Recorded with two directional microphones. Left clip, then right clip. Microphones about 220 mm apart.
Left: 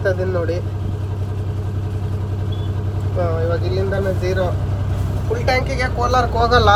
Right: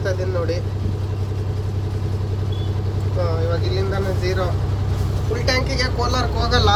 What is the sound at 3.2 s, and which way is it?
Speech, centre (ahead or behind).